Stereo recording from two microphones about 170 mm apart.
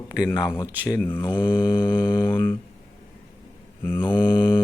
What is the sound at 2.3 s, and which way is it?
Mantra, 10° left (ahead or behind).